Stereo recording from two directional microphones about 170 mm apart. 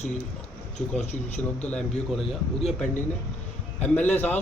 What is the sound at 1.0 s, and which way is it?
Speech, 40° left (ahead or behind).